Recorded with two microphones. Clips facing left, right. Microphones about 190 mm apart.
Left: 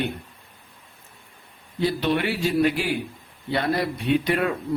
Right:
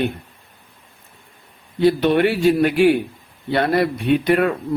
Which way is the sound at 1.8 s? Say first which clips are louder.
Right 8 dB; 55° right (ahead or behind).